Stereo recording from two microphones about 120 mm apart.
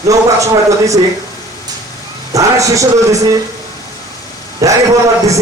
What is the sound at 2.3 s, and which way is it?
Speech, 25° right (ahead or behind).